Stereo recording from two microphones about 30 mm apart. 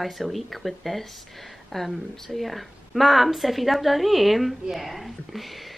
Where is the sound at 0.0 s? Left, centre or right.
Centre.